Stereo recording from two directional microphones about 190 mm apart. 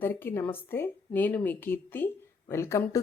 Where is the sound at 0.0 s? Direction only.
10° left (ahead or behind).